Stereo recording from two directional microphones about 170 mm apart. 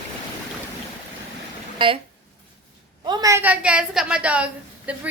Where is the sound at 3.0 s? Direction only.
20° right (ahead or behind).